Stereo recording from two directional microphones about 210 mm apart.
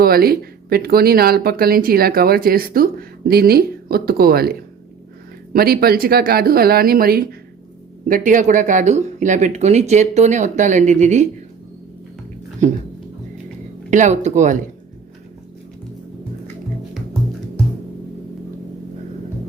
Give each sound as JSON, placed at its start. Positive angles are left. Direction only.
{"t": 0.0, "sound": "speech", "side_deg": -45}
{"t": 5.5, "sound": "speech", "side_deg": -45}
{"t": 13.9, "sound": "speech", "side_deg": -35}